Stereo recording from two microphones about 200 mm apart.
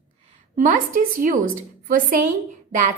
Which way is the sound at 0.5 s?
40° right (ahead or behind).